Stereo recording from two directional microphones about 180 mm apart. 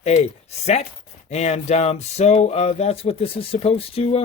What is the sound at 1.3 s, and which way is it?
A man's voice, 35° left (ahead or behind).